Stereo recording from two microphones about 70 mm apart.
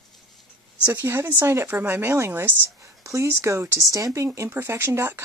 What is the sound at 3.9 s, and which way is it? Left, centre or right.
Speech, right.